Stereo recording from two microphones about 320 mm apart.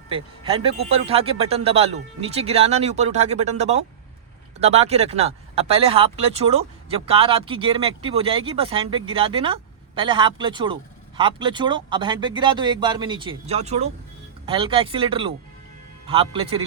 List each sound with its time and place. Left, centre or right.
0.1 s speech: centre